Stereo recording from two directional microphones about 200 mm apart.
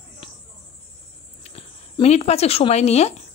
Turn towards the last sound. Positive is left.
turn(degrees=30)  # may be behind; listen again after turning